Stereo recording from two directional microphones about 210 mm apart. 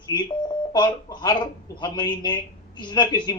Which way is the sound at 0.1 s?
15° left (ahead or behind).